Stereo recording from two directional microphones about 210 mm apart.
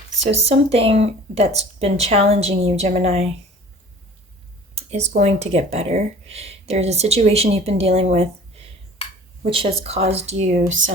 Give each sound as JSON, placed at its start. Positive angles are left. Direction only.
{"t": 0.3, "sound": "speech", "side_deg": -30}
{"t": 4.7, "sound": "speech", "side_deg": -30}
{"t": 9.0, "sound": "a sound", "side_deg": 25}
{"t": 9.4, "sound": "speech", "side_deg": -25}